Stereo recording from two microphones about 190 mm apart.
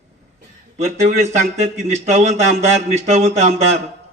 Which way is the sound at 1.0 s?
35° right (ahead or behind).